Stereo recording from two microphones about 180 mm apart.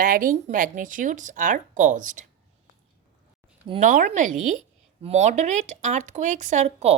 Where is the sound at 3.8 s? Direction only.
45° right (ahead or behind).